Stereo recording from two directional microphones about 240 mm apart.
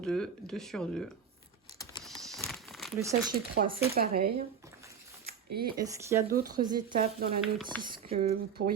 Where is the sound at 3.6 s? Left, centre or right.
Right.